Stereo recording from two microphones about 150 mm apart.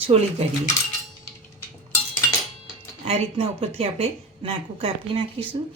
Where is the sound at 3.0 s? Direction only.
40° right (ahead or behind).